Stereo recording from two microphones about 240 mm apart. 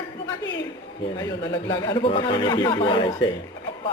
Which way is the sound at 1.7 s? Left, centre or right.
Centre.